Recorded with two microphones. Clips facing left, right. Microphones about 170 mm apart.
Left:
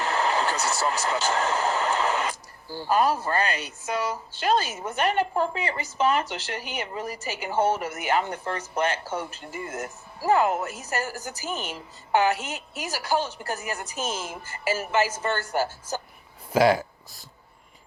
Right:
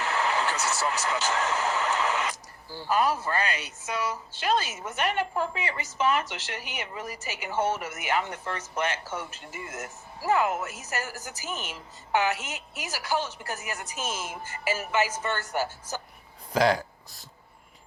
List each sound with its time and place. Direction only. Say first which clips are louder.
0.0 s vehicle: left 3 dB; 35° left (ahead or behind)
2.7 s a woman's voice: left 3 dB; 35° left (ahead or behind)
16.5 s speech: left 3 dB; 5° left (ahead or behind)